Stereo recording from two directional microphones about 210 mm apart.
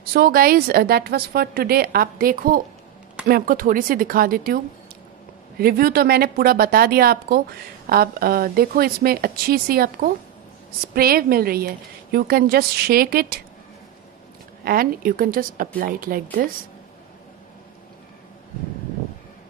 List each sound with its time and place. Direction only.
0.1 s a woman's voice: 45° right (ahead or behind)
5.6 s a woman's voice: 45° right (ahead or behind)
14.6 s a woman's voice: 45° right (ahead or behind)